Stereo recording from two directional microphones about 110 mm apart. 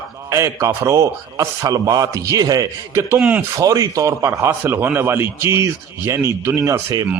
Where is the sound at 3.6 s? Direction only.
30° right (ahead or behind).